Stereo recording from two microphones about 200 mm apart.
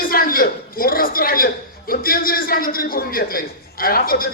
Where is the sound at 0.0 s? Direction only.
45° left (ahead or behind).